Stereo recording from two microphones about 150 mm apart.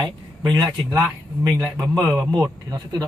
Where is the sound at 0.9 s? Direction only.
15° right (ahead or behind).